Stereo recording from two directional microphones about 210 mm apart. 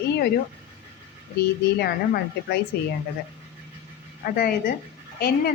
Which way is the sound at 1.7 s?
45° left (ahead or behind).